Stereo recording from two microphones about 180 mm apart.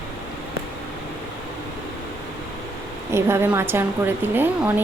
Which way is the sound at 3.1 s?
15° right (ahead or behind).